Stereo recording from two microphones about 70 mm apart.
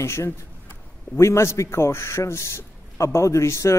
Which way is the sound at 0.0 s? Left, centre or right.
Left.